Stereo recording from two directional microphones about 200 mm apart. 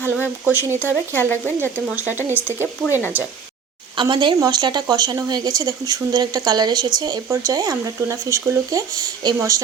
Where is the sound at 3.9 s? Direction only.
25° right (ahead or behind).